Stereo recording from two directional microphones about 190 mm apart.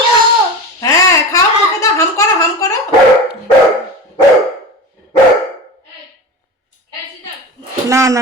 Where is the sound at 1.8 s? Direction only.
15° left (ahead or behind).